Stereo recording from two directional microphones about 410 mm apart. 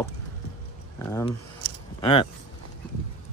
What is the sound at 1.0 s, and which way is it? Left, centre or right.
Speech, centre.